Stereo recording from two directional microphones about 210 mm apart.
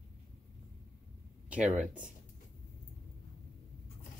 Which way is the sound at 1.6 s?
35° right (ahead or behind).